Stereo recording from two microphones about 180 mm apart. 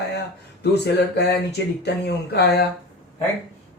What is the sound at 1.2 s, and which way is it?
Speech, 65° left (ahead or behind).